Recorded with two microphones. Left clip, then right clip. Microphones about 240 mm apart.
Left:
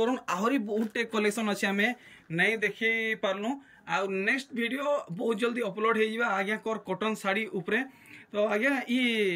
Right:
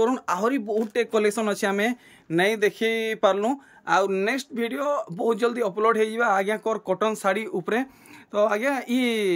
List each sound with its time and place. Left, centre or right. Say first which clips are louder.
0.0 s speech: right 5 dB; centre